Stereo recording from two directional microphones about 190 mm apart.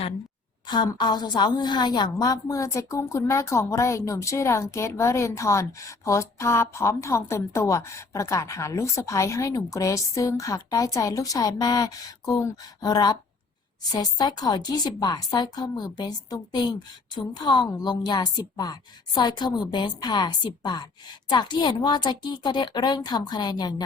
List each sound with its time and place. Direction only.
0.7 s a woman's voice: 25° left (ahead or behind)